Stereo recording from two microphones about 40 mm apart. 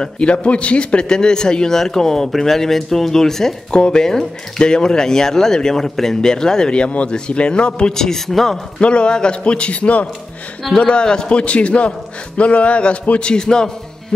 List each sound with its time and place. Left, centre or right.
0.0 s a man's voice: left
1.0 s speech: centre
7.9 s speech: centre
8.7 s a man's voice: left
13.3 s a man's voice: centre